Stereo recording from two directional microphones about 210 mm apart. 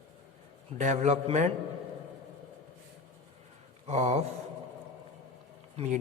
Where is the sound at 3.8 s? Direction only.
30° right (ahead or behind).